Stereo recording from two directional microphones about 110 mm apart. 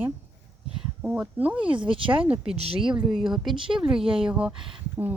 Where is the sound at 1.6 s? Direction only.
50° right (ahead or behind).